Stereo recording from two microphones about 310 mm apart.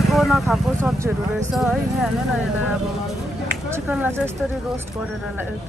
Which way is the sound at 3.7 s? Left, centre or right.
Centre.